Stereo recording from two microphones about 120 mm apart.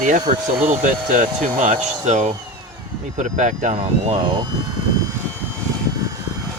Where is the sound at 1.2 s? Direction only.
90° right.